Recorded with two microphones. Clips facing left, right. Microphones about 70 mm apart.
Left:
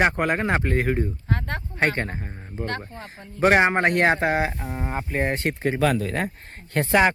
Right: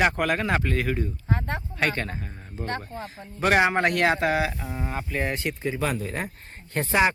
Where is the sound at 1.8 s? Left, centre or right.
Left.